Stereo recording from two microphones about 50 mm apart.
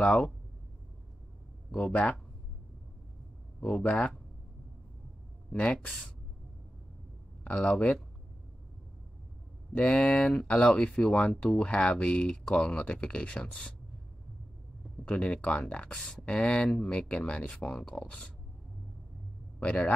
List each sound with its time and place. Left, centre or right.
1.7 s speech: left
3.8 s speech: left
5.5 s speech: left
7.4 s speech: left
9.8 s speech: centre
15.0 s speech: left
19.6 s speech: left